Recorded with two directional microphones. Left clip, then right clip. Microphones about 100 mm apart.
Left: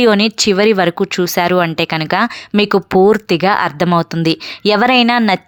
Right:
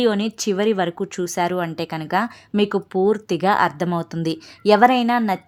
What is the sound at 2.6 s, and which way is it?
Speech, 75° left (ahead or behind).